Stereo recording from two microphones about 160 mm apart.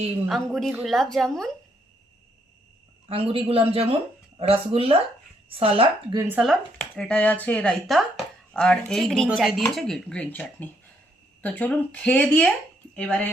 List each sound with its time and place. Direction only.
0.3 s a woman's voice: centre (ahead or behind)
3.1 s a man's voice: 35° right (ahead or behind)
6.1 s speech: 15° right (ahead or behind)
6.9 s a woman's voice: 10° left (ahead or behind)